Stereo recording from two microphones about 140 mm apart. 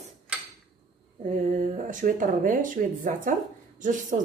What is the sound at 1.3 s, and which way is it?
A woman's voice, 70° right (ahead or behind).